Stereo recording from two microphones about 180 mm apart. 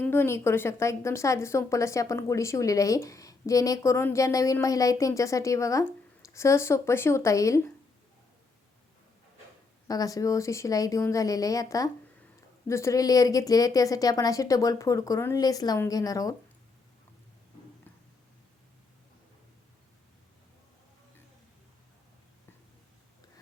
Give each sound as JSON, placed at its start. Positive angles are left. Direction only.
{"t": 0.0, "sound": "a woman's voice", "side_deg": 10}
{"t": 9.8, "sound": "speech", "side_deg": 20}